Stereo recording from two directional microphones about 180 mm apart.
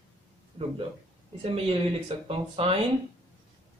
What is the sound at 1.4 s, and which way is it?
Speech, 30° right (ahead or behind).